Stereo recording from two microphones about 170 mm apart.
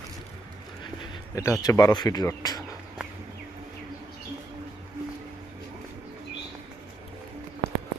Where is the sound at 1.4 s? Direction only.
20° left (ahead or behind).